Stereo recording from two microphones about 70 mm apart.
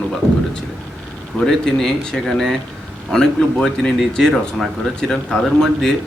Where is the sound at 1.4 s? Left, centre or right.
Centre.